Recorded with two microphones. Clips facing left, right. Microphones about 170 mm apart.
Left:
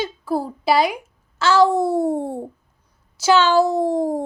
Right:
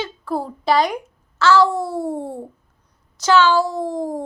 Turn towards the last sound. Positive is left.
turn(degrees=25)  # may be behind; listen again after turning